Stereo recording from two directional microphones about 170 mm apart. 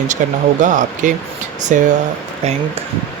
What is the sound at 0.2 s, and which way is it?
Speech, 50° right (ahead or behind).